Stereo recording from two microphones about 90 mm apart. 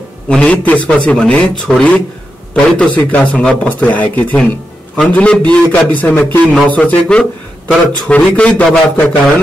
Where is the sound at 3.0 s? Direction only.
15° left (ahead or behind).